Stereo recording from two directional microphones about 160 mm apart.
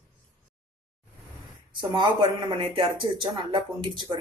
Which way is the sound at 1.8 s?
30° right (ahead or behind).